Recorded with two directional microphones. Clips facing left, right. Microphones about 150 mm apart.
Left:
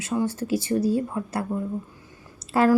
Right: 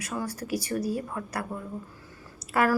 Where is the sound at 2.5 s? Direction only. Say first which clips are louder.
Left 5 dB; 25° left (ahead or behind).